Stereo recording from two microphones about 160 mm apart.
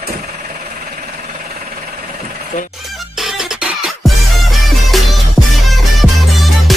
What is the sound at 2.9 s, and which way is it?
Music, centre (ahead or behind).